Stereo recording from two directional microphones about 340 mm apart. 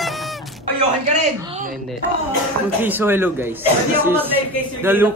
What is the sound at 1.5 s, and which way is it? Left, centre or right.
Speech, right.